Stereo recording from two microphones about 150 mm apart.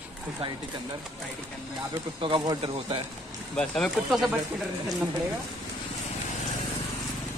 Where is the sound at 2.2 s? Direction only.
30° right (ahead or behind).